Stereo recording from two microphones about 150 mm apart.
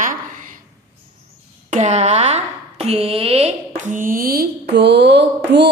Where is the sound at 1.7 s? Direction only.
50° right (ahead or behind).